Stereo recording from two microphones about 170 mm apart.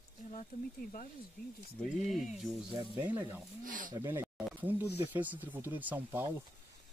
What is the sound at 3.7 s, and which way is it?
Speech, 50° right (ahead or behind).